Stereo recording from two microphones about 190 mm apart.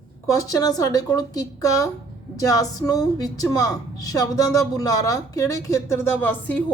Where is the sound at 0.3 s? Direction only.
20° left (ahead or behind).